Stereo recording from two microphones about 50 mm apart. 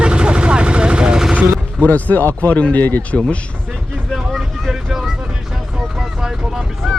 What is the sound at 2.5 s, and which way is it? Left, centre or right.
Speech, left.